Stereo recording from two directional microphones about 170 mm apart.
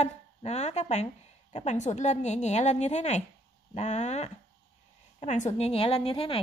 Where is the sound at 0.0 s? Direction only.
40° left (ahead or behind).